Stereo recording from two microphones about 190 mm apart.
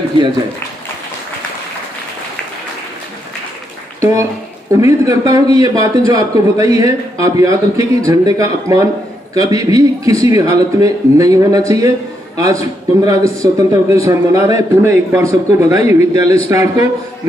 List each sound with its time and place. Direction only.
4.0 s a man's voice: 15° right (ahead or behind)